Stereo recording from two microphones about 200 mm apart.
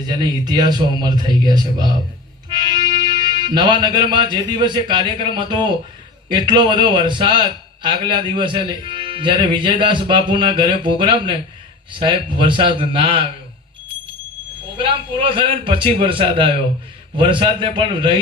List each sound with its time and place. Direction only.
0.4 s a man's voice: 20° right (ahead or behind)
14.8 s a man's voice: 25° right (ahead or behind)